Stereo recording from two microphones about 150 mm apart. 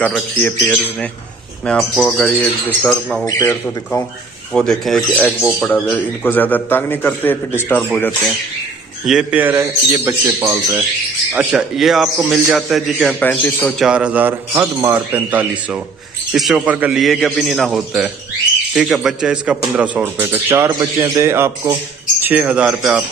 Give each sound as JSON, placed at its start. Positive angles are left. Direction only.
{"t": 0.0, "sound": "a man's voice", "side_deg": 10}
{"t": 3.3, "sound": "a man's voice", "side_deg": 20}
{"t": 4.6, "sound": "a man's voice", "side_deg": 0}
{"t": 9.0, "sound": "a man's voice", "side_deg": -5}
{"t": 11.3, "sound": "a man's voice", "side_deg": -5}
{"t": 13.2, "sound": "a man's voice", "side_deg": 10}
{"t": 13.7, "sound": "a man's voice", "side_deg": -5}